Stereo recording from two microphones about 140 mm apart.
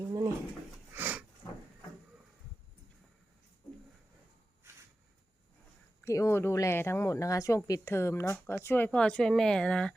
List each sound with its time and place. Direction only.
0.0 s dog: 25° right (ahead or behind)
0.9 s a sound: 15° right (ahead or behind)
6.1 s speech: 20° left (ahead or behind)